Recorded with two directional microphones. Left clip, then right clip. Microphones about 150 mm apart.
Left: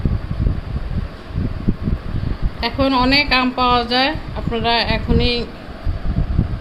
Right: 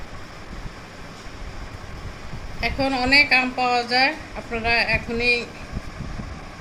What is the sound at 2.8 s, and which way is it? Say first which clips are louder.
Speech: left 2 dB; 55° left (ahead or behind).